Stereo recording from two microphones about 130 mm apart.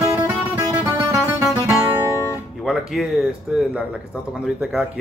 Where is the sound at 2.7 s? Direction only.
Centre (ahead or behind).